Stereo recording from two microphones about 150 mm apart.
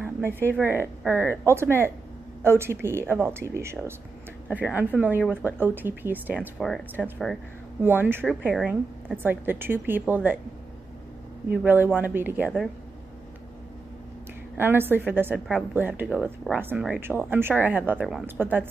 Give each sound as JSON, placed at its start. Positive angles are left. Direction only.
{"t": 0.0, "sound": "a sound", "side_deg": -15}
{"t": 0.6, "sound": "speech", "side_deg": -15}
{"t": 6.6, "sound": "speech", "side_deg": 5}
{"t": 7.8, "sound": "speech", "side_deg": -15}
{"t": 11.5, "sound": "speech", "side_deg": -15}
{"t": 14.6, "sound": "speech", "side_deg": -15}